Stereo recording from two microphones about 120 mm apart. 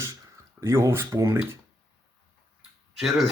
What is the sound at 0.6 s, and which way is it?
Speech, 25° right (ahead or behind).